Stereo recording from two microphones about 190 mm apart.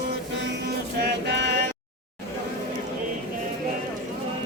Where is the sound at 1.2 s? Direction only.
60° right (ahead or behind).